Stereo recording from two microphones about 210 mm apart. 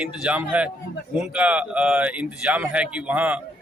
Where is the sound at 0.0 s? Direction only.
5° right (ahead or behind).